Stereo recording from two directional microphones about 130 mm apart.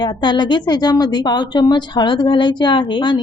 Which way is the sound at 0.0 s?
35° left (ahead or behind).